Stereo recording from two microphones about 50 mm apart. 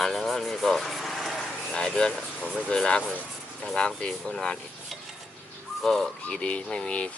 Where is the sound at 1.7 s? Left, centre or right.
Centre.